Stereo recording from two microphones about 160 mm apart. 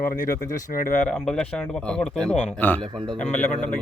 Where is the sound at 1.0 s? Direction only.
5° left (ahead or behind).